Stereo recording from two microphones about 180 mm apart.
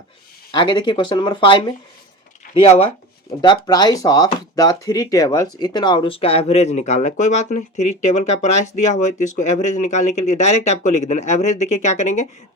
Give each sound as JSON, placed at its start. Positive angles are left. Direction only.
{"t": 0.5, "sound": "speech", "side_deg": 25}
{"t": 2.4, "sound": "a sound", "side_deg": 50}
{"t": 3.4, "sound": "speech", "side_deg": 25}